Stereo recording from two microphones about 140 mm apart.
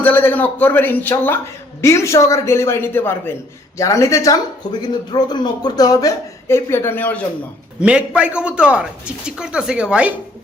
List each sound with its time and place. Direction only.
0.0 s a man's voice: 15° left (ahead or behind)
7.8 s a man's voice: 5° right (ahead or behind)